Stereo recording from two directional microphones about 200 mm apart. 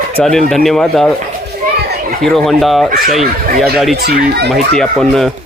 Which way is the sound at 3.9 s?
55° right (ahead or behind).